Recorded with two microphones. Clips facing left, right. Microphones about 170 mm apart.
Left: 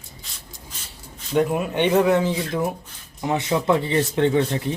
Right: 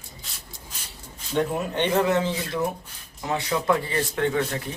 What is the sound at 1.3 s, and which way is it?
Speech, 10° left (ahead or behind).